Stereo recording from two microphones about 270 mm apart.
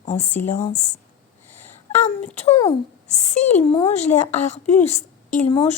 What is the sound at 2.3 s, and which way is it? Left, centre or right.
A woman's voice, left.